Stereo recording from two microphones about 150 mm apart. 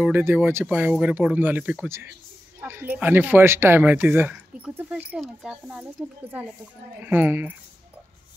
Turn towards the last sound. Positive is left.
turn(degrees=-10)  # may be behind; listen again after turning